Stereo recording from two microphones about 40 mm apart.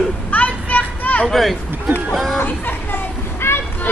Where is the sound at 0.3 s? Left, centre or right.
Left.